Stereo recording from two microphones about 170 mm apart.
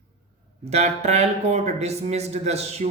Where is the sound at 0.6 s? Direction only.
40° right (ahead or behind).